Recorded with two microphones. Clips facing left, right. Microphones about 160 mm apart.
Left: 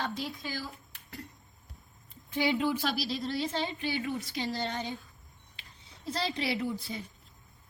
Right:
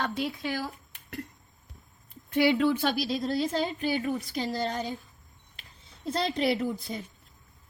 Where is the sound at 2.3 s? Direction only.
65° right (ahead or behind).